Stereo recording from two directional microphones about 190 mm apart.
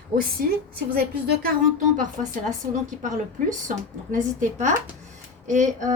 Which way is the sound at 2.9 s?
40° right (ahead or behind).